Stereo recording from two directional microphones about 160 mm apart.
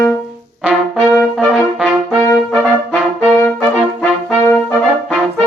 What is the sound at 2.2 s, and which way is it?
Trumpet, 10° left (ahead or behind).